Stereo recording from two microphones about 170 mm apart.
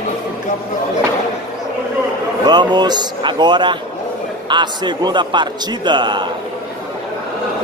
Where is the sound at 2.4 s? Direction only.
25° right (ahead or behind).